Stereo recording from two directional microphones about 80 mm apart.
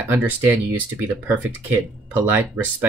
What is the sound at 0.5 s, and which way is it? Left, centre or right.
Speech, right.